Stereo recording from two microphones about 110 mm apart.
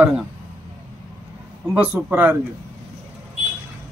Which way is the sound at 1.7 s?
15° right (ahead or behind).